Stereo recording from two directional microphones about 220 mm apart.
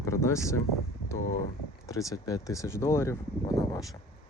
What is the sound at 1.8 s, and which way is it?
Speech, 15° left (ahead or behind).